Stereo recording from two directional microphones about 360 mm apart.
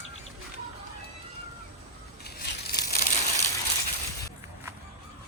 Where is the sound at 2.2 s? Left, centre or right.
Left.